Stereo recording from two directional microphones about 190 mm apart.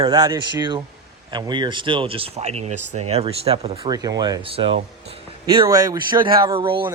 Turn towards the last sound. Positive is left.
turn(degrees=-25)  # may be behind; listen again after turning